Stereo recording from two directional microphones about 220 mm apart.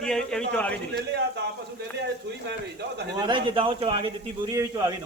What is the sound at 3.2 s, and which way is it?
Speech, 20° right (ahead or behind).